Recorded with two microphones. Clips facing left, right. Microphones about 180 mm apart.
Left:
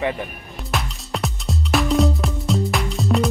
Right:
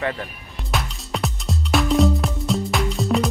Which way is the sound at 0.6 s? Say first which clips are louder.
Even; centre (ahead or behind).